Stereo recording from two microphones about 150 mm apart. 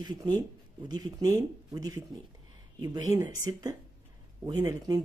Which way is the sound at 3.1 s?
25° right (ahead or behind).